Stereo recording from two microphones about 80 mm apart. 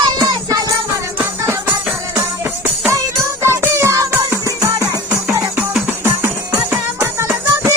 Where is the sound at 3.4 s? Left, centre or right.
Right.